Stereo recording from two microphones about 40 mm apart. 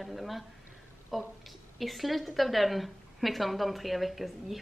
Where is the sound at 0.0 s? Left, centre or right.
Centre.